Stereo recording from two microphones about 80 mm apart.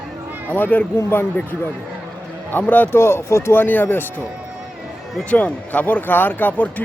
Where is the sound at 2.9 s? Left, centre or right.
Left.